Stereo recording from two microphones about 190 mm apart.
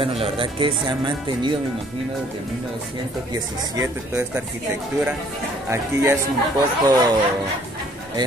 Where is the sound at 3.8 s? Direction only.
15° right (ahead or behind).